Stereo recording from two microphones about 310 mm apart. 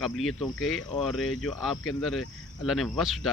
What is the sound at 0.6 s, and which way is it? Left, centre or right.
Cricket, left.